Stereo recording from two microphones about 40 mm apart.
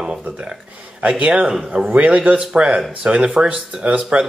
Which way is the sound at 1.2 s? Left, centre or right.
Right.